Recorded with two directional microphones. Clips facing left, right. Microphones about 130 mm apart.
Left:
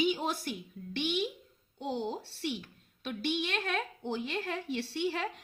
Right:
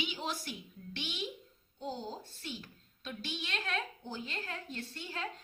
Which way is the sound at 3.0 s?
60° left (ahead or behind).